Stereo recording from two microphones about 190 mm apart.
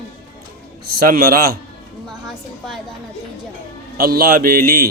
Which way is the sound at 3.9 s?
50° right (ahead or behind).